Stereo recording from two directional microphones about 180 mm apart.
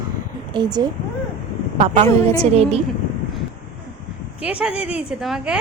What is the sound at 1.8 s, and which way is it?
A woman's voice, 40° right (ahead or behind).